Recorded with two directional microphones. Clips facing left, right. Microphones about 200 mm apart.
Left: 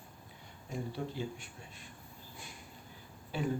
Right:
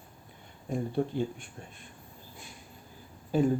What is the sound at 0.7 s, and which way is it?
Speech, 55° right (ahead or behind).